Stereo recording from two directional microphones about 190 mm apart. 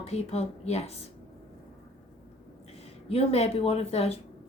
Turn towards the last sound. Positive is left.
turn(degrees=30)  # may be behind; listen again after turning